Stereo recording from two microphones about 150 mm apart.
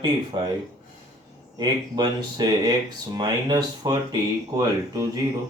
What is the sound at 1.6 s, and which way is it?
Speech, 30° right (ahead or behind).